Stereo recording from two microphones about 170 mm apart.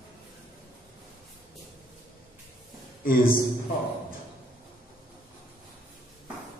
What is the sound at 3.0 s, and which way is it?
Speech, 55° left (ahead or behind).